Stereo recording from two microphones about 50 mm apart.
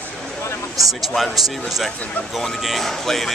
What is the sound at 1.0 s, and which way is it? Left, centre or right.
Speech, centre.